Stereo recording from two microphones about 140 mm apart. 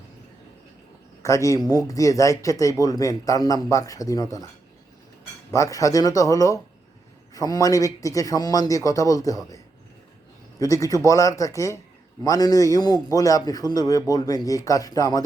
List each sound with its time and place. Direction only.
1.2 s speech: 20° left (ahead or behind)
5.5 s speech: 25° left (ahead or behind)
10.6 s speech: 25° left (ahead or behind)